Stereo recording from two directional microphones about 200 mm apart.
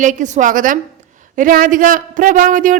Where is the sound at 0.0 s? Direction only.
40° right (ahead or behind).